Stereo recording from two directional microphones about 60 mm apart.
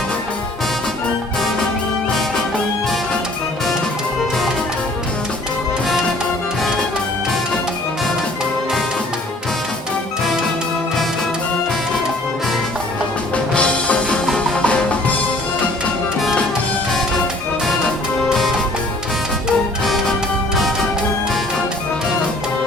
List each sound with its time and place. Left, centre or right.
2.0 s music: centre
13.3 s music: centre
18.3 s music: centre
19.8 s music: centre